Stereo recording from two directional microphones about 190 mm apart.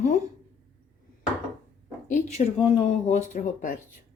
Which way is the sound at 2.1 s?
30° left (ahead or behind).